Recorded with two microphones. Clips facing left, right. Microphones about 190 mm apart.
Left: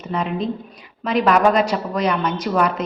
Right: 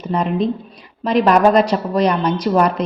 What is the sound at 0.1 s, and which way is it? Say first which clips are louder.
A woman's voice: right 4 dB; 35° right (ahead or behind).